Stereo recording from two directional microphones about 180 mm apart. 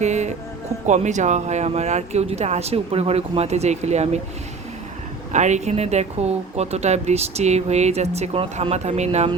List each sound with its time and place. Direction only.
0.0 s music: 40° right (ahead or behind)
0.9 s speech: 40° right (ahead or behind)
5.3 s speech: 40° right (ahead or behind)